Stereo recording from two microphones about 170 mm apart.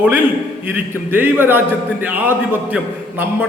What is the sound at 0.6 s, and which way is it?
A man's voice, 10° right (ahead or behind).